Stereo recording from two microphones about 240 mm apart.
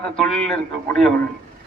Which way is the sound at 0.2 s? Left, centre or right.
Centre.